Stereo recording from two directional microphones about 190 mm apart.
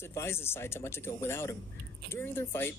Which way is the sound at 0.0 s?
15° left (ahead or behind).